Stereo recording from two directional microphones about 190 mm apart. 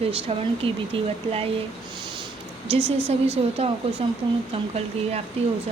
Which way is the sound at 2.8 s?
10° right (ahead or behind).